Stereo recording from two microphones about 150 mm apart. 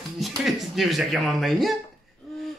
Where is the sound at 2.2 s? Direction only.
Centre (ahead or behind).